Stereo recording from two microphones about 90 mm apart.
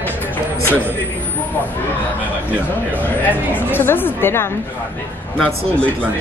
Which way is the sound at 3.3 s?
25° left (ahead or behind).